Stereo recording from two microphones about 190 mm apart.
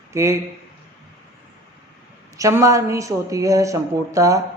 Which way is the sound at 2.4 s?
15° right (ahead or behind).